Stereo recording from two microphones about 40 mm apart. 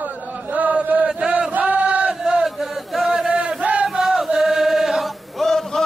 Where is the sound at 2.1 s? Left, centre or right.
Centre.